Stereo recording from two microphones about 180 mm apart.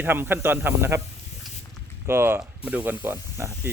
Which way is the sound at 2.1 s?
15° right (ahead or behind).